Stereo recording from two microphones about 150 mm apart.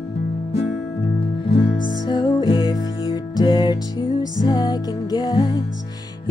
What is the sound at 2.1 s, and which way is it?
Music, 35° left (ahead or behind).